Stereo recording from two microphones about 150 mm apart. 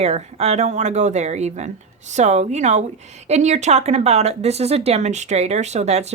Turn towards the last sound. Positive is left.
turn(degrees=-45)  # may be behind; listen again after turning